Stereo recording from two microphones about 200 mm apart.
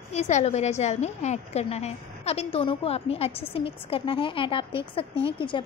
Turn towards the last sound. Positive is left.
turn(degrees=25)  # may be behind; listen again after turning